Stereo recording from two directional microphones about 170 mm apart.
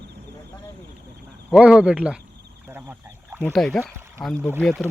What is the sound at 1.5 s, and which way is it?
Speech, 5° right (ahead or behind).